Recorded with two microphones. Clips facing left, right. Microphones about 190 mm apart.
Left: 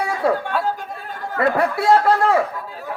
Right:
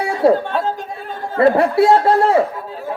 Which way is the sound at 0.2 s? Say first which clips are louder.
Right 8 dB; 25° right (ahead or behind).